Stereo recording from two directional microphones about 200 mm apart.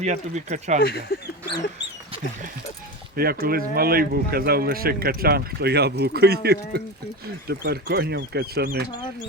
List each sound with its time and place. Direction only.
0.0 s speech: 35° right (ahead or behind)
0.8 s speech: 50° left (ahead or behind)
3.2 s speech: 50° right (ahead or behind)